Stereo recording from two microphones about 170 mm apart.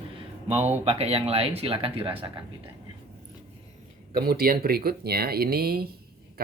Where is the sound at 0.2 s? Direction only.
40° right (ahead or behind).